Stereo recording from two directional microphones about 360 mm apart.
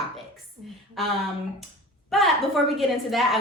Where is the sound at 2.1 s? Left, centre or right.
Centre.